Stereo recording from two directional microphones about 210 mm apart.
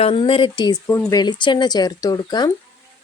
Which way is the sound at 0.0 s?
25° left (ahead or behind).